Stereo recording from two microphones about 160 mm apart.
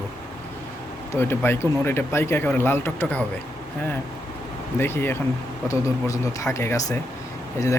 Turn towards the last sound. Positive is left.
turn(degrees=20)  # may be behind; listen again after turning